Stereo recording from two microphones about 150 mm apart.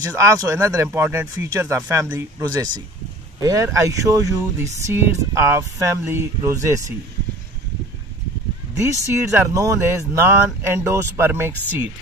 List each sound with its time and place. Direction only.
0.0 s speech: 20° right (ahead or behind)
9.0 s speech: 20° right (ahead or behind)